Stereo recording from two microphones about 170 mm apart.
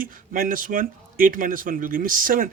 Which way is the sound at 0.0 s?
55° right (ahead or behind).